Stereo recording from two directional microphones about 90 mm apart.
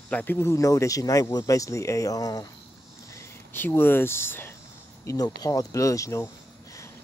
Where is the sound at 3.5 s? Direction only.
25° left (ahead or behind).